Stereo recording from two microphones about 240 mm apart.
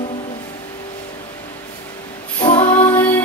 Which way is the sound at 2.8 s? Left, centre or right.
Centre.